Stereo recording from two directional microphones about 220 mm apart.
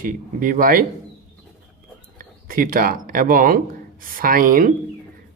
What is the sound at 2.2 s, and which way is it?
Speech, 40° right (ahead or behind).